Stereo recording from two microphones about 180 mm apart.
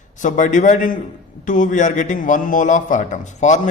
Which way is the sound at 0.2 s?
45° left (ahead or behind).